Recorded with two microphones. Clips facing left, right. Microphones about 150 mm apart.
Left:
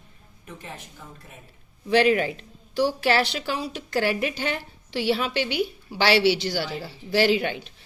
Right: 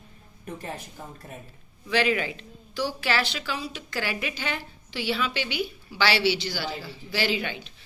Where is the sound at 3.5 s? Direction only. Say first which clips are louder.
Left 4 dB; 55° left (ahead or behind).